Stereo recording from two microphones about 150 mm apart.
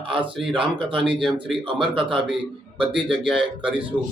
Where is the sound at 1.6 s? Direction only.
35° right (ahead or behind).